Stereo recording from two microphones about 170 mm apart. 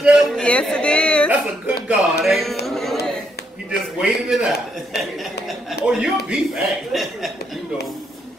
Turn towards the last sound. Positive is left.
turn(degrees=0)  # may be behind; listen again after turning